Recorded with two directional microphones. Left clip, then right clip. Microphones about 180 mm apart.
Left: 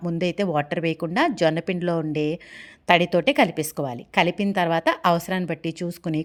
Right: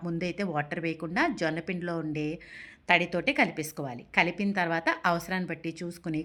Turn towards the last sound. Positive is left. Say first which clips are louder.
# left 7 dB
turn(degrees=50)  # may be behind; listen again after turning